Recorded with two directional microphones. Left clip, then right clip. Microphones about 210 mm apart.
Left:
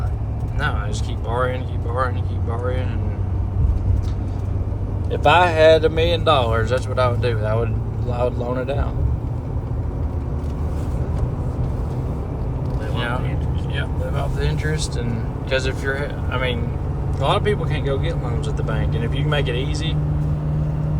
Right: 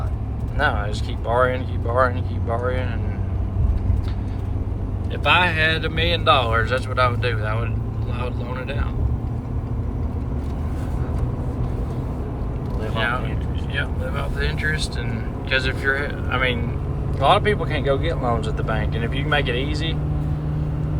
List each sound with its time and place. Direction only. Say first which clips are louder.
1.3 s speech: right 4 dB; 5° left (ahead or behind)
5.2 s speech: left 4 dB; 25° left (ahead or behind)
14.2 s speech: right 1 dB; 20° left (ahead or behind)